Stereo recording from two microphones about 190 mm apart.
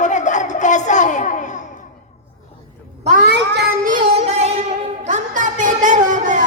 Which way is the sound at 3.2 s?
60° right (ahead or behind).